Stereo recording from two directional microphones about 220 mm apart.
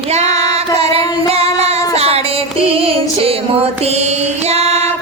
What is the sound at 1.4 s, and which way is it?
Female singing, 25° right (ahead or behind).